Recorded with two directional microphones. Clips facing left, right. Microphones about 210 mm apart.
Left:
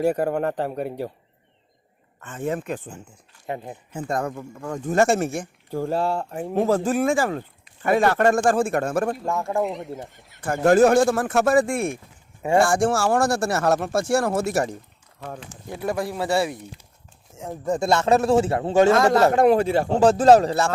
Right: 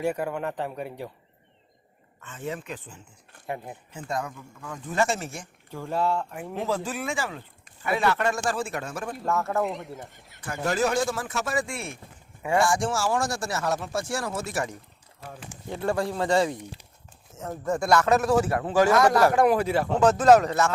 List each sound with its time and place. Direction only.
0.0 s a man's voice: 40° left (ahead or behind)
2.2 s speech: 50° left (ahead or behind)
3.4 s a man's voice: 25° left (ahead or behind)
3.9 s speech: 50° left (ahead or behind)
9.3 s speech: 15° left (ahead or behind)
9.6 s speech: centre (ahead or behind)
10.6 s speech: 50° left (ahead or behind)
12.4 s speech: 30° left (ahead or behind)
12.6 s speech: 55° left (ahead or behind)
14.5 s a man's voice: 35° left (ahead or behind)
15.7 s a man's voice: 10° left (ahead or behind); by 20.7 s 30° left (ahead or behind)